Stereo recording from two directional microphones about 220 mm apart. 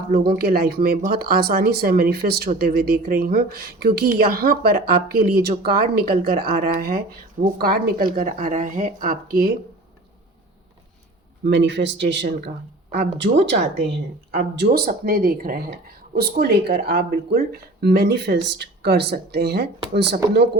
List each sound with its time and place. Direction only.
0.1 s speech: 45° right (ahead or behind)
11.4 s speech: 55° right (ahead or behind)